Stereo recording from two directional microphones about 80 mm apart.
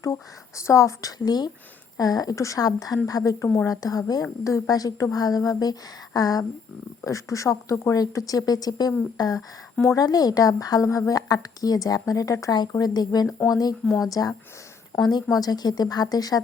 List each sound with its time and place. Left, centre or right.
0.0 s speech: left
1.2 s speech: left
12.7 s speech: left
13.8 s speech: centre
14.1 s speech: left